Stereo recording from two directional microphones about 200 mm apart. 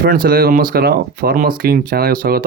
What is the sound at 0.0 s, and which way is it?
Speech, 45° right (ahead or behind).